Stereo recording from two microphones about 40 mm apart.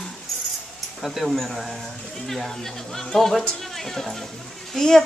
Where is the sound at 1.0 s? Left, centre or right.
Centre.